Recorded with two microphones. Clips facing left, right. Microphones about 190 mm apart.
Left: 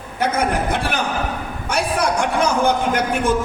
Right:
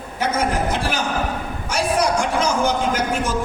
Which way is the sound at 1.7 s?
60° left (ahead or behind).